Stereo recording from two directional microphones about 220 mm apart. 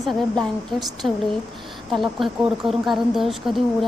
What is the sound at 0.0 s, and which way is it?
A woman's voice, centre (ahead or behind).